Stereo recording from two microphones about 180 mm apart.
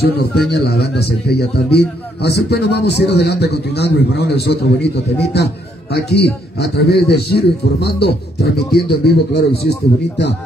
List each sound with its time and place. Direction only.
0.0 s a man's voice: 65° left (ahead or behind)